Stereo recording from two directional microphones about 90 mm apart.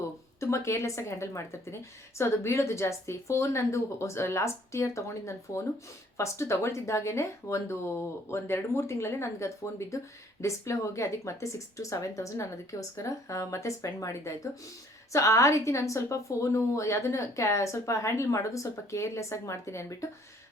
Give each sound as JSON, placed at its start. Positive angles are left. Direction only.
{"t": 0.3, "sound": "a woman's voice", "side_deg": 30}